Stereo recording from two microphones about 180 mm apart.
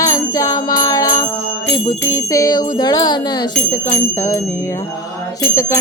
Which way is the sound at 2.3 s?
20° left (ahead or behind).